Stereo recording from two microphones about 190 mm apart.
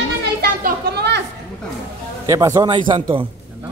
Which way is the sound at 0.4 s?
50° right (ahead or behind).